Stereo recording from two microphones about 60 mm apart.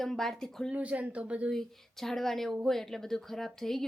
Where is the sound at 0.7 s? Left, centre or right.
Right.